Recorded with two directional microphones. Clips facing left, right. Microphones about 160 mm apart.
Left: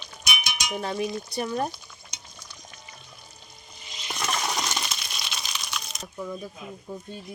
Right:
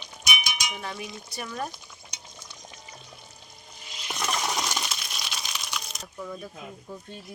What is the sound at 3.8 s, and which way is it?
Coin, 5° right (ahead or behind).